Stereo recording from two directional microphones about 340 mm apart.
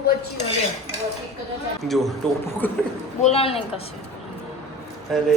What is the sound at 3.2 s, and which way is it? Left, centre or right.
Speech, centre.